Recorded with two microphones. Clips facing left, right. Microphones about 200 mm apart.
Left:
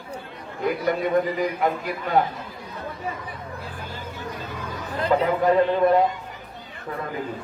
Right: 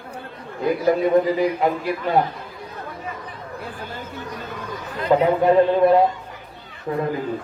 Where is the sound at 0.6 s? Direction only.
25° right (ahead or behind).